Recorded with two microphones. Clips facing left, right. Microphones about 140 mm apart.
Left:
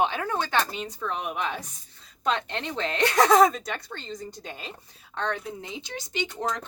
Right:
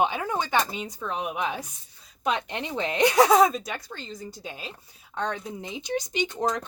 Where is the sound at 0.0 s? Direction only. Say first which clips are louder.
Right 1 dB; 15° right (ahead or behind).